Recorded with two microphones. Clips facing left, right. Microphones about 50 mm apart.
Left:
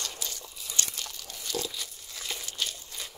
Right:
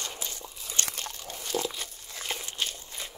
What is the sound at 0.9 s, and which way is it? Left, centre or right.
Crunch, right.